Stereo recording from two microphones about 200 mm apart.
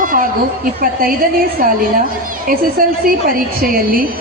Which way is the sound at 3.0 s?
45° right (ahead or behind).